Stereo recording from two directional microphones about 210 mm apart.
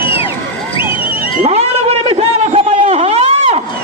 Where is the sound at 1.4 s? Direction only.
30° right (ahead or behind).